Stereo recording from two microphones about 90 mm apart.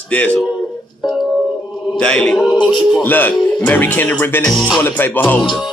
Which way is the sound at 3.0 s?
20° left (ahead or behind).